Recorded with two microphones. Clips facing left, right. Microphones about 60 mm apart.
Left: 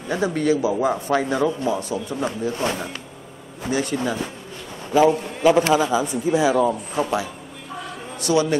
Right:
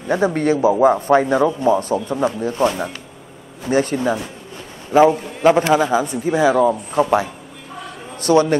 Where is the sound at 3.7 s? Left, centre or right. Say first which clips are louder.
Right 5 dB; right.